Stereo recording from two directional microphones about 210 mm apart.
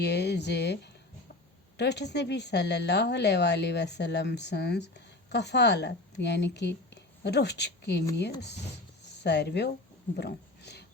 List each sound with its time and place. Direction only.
0.0 s speech: 55° left (ahead or behind)
9.0 s speech: 55° left (ahead or behind)